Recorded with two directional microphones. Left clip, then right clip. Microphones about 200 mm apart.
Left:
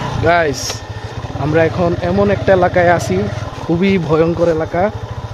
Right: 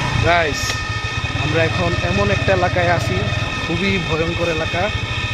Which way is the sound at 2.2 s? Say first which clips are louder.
Left 6 dB; 55° left (ahead or behind).